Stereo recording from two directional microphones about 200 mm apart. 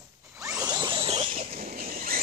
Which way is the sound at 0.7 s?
20° right (ahead or behind).